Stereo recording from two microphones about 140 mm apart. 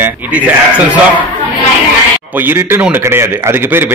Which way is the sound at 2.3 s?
15° right (ahead or behind).